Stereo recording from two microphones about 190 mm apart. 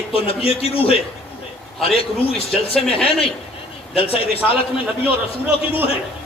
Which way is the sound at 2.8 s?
5° left (ahead or behind).